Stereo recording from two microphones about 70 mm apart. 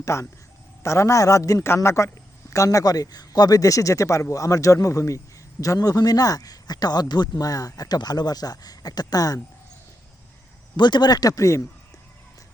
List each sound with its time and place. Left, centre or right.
0.0 s a man's voice: left
1.6 s a man's voice: left
10.8 s speech: left